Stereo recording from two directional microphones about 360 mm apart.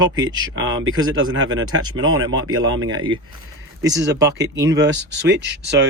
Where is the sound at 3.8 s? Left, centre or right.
Right.